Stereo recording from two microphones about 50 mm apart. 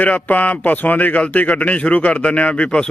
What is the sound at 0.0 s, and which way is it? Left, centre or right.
Speech, left.